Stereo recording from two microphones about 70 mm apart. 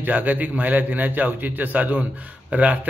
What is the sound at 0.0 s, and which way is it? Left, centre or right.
A man's voice, right.